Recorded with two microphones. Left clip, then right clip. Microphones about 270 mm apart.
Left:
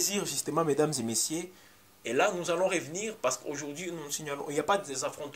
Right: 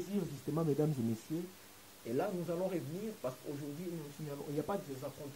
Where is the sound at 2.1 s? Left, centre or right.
Centre.